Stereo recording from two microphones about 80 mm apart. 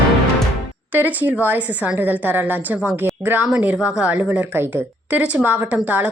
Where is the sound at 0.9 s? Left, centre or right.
Right.